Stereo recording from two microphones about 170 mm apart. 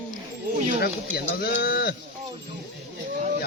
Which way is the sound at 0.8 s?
65° left (ahead or behind).